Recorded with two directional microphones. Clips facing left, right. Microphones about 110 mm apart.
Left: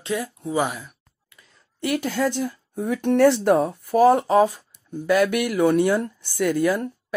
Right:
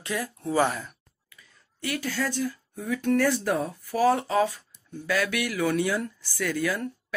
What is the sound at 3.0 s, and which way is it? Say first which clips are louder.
Speech: left 7 dB; 60° left (ahead or behind).